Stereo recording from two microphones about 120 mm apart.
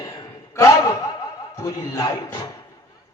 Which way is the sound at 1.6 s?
30° left (ahead or behind).